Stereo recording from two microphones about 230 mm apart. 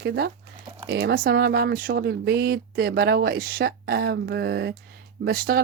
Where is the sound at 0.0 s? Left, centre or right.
Right.